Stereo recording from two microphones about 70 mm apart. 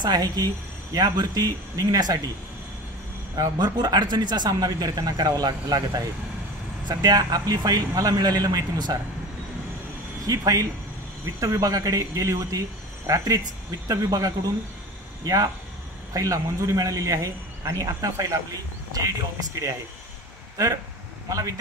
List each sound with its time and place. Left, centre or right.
0.0 s speech: right
0.9 s speech: right
3.3 s speech: right
6.9 s speech: right
10.2 s a man's voice: right
20.5 s a man's voice: right